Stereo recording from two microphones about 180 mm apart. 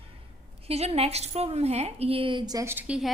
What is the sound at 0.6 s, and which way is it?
Speech, 35° right (ahead or behind).